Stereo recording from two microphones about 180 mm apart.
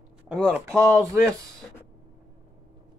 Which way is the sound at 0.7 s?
15° right (ahead or behind).